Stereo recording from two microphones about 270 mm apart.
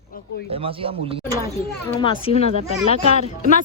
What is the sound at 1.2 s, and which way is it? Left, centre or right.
Speech, centre.